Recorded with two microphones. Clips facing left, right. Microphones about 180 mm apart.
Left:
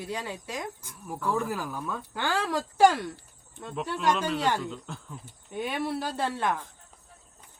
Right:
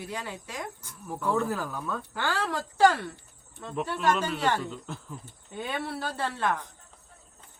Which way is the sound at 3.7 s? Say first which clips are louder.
Right 1 dB; 5° right (ahead or behind).